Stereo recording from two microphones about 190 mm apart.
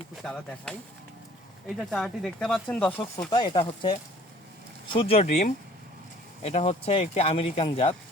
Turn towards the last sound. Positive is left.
turn(degrees=30)  # may be behind; listen again after turning